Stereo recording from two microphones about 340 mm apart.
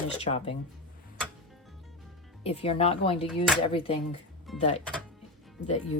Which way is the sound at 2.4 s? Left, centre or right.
Centre.